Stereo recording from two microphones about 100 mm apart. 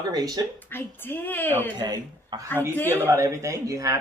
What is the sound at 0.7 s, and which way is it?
Speech, 20° left (ahead or behind).